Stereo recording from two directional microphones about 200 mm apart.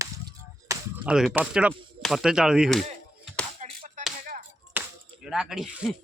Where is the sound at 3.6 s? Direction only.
30° right (ahead or behind).